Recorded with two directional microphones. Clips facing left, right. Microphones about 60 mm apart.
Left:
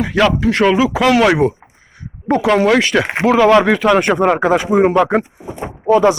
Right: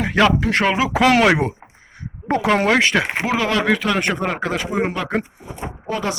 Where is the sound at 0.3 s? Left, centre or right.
Right.